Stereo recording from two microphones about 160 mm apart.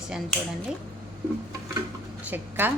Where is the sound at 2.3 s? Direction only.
10° right (ahead or behind).